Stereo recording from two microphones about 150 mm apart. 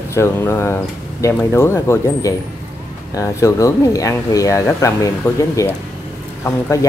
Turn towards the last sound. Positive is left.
turn(degrees=15)  # may be behind; listen again after turning